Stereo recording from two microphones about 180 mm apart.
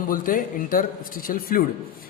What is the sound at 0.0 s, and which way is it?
A man's voice, 50° left (ahead or behind).